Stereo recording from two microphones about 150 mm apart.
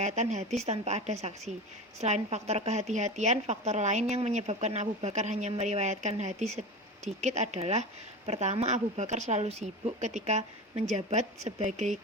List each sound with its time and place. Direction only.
0.0 s speech: 50° right (ahead or behind)